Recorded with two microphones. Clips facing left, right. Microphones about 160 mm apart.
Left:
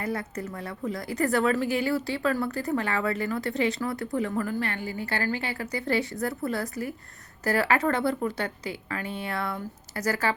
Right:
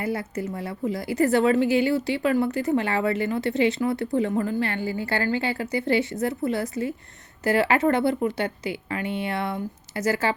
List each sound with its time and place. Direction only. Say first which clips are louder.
0.0 s speech: right 4 dB; 25° right (ahead or behind)